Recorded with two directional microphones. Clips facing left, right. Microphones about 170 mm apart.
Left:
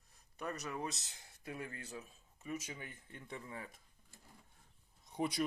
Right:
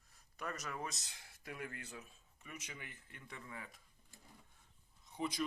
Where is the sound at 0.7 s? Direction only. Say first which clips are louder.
Left 3 dB; 20° left (ahead or behind).